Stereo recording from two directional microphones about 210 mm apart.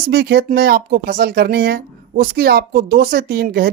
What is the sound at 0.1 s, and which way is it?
Speech, 50° right (ahead or behind).